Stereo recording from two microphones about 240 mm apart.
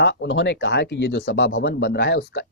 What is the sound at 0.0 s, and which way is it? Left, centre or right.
Speech, left.